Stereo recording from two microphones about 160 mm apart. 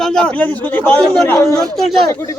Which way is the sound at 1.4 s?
20° left (ahead or behind).